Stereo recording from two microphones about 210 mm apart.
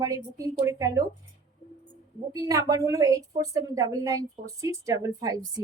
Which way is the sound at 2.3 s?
15° right (ahead or behind).